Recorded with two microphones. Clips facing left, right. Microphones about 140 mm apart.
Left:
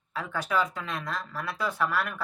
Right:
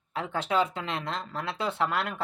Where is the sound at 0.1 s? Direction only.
25° right (ahead or behind).